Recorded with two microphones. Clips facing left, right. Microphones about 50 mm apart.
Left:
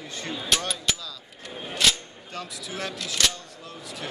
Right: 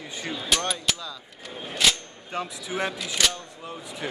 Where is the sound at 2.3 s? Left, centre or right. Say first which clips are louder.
Right 5 dB; right.